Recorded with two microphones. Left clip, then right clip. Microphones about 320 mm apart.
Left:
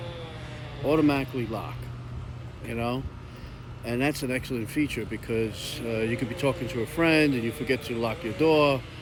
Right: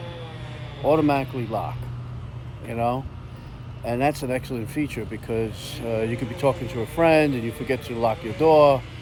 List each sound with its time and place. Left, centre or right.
0.9 s speech: centre
5.8 s speech: right
6.3 s speech: centre
8.1 s speech: right
8.5 s speech: centre